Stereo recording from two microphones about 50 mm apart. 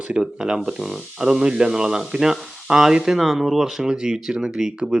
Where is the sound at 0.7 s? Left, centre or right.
Centre.